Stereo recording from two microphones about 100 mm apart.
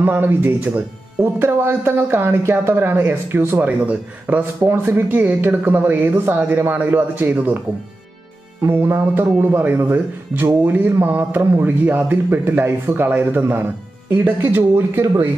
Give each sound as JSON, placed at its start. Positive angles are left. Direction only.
{"t": 0.0, "sound": "speech", "side_deg": -20}
{"t": 8.6, "sound": "speech", "side_deg": -25}